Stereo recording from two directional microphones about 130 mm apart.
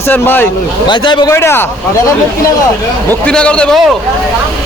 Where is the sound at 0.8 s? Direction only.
35° left (ahead or behind).